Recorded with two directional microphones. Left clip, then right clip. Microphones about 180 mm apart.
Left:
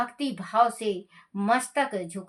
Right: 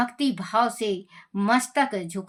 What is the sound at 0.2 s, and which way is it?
Speech, 25° right (ahead or behind).